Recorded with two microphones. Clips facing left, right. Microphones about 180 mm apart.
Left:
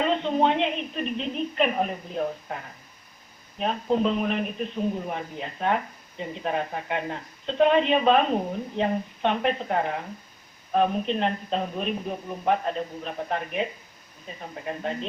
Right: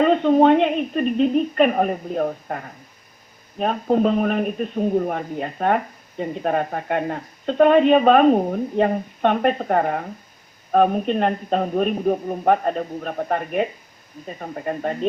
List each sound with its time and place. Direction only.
0.0 s speech: 50° right (ahead or behind)